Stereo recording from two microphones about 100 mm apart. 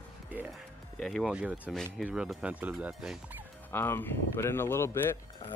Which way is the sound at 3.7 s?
20° left (ahead or behind).